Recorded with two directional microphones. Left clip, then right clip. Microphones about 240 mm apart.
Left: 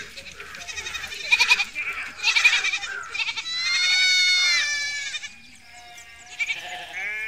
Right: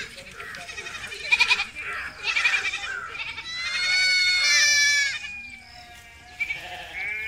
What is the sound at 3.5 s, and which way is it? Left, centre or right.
Goat, centre.